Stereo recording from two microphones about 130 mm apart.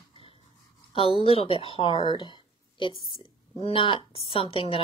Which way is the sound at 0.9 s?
45° left (ahead or behind).